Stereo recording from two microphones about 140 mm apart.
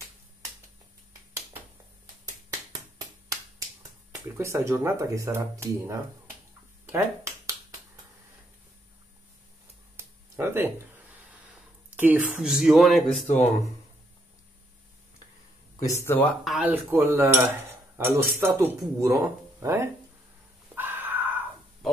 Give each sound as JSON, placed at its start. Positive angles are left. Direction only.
{"t": 4.1, "sound": "speech", "side_deg": -20}
{"t": 6.9, "sound": "finger snapping", "side_deg": -20}
{"t": 9.9, "sound": "a sound", "side_deg": -20}
{"t": 11.5, "sound": "speech", "side_deg": -10}
{"t": 15.8, "sound": "speech", "side_deg": 20}
{"t": 16.4, "sound": "cutlery", "side_deg": -10}
{"t": 17.9, "sound": "speech", "side_deg": -15}
{"t": 20.7, "sound": "a sound", "side_deg": -15}